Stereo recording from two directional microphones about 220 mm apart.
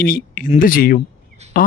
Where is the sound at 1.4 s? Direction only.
30° right (ahead or behind).